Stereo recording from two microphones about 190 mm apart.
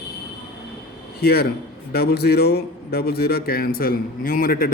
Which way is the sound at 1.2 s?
55° left (ahead or behind).